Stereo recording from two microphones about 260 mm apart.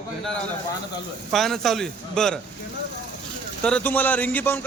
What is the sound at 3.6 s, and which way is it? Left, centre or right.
Speech, centre.